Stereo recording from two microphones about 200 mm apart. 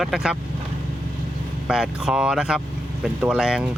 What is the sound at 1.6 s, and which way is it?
Speech, 5° right (ahead or behind).